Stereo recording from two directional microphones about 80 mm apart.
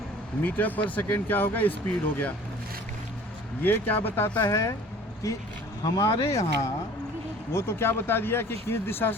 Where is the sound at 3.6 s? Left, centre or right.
Left.